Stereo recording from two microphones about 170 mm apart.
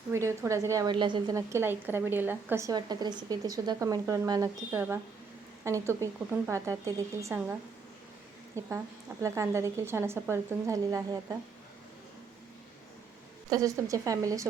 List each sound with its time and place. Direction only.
0.1 s a woman's voice: 15° right (ahead or behind)
8.6 s a woman's voice: 15° left (ahead or behind)
9.2 s a woman's voice: 15° right (ahead or behind)
13.5 s speech: 20° right (ahead or behind)